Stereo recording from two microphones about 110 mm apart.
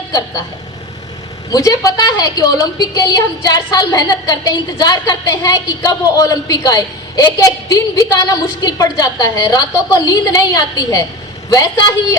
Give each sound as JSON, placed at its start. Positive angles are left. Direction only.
{"t": 1.5, "sound": "a woman's voice", "side_deg": 35}